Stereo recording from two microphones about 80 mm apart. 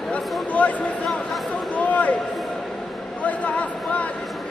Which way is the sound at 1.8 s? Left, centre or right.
Centre.